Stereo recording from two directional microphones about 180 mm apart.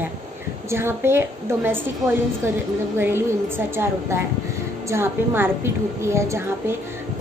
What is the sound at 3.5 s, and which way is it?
A woman's voice, 15° right (ahead or behind).